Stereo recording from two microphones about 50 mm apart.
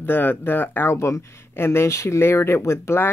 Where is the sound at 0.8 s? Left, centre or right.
Left.